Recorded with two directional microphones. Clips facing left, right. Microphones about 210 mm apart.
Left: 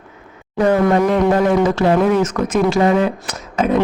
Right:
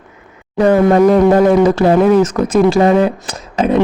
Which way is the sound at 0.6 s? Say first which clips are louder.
Right 5 dB; 35° right (ahead or behind).